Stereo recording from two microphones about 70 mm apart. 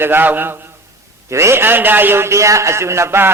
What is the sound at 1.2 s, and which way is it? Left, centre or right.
A man's voice, right.